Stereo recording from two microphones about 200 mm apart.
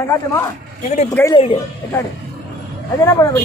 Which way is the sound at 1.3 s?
25° left (ahead or behind).